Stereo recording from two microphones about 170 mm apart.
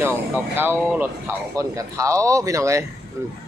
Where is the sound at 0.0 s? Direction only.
15° right (ahead or behind).